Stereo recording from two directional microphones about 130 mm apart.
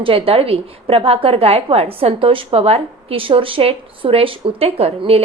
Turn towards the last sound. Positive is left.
turn(degrees=-50)  # may be behind; listen again after turning